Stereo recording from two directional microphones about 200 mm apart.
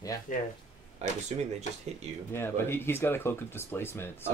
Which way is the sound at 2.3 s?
10° left (ahead or behind).